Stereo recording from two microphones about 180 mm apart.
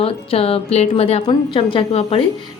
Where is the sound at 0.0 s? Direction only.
35° left (ahead or behind).